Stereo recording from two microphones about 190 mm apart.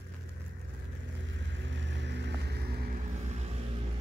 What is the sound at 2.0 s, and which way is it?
Music, 65° right (ahead or behind).